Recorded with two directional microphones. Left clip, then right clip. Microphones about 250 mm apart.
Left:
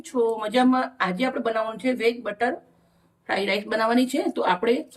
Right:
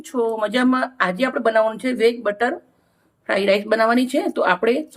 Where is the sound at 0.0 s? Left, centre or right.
Centre.